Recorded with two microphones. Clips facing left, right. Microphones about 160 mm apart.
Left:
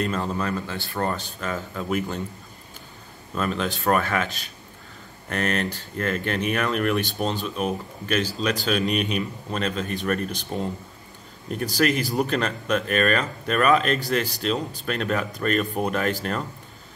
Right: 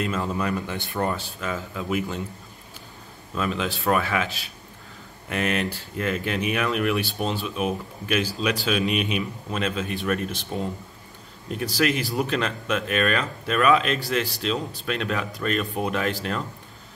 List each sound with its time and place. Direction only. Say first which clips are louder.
0.0 s speech: even; 5° right (ahead or behind)
0.5 s speech: right 1 dB; 15° right (ahead or behind)
1.0 s speech: left 1 dB; 5° right (ahead or behind)
3.3 s speech: left 1 dB; centre (ahead or behind)